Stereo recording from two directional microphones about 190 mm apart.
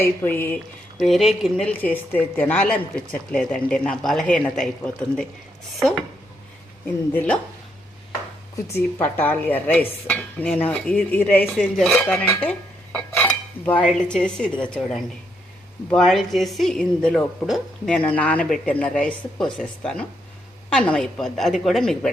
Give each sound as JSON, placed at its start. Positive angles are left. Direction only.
{"t": 0.0, "sound": "dishes", "side_deg": 10}
{"t": 0.9, "sound": "speech", "side_deg": 0}
{"t": 7.1, "sound": "dishes", "side_deg": 10}
{"t": 8.7, "sound": "dishes", "side_deg": 10}
{"t": 13.7, "sound": "speech", "side_deg": 5}